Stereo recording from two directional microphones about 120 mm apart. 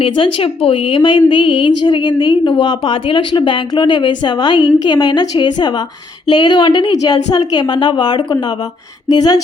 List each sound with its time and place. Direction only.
0.0 s a woman's voice: 50° left (ahead or behind); by 9.4 s 30° left (ahead or behind)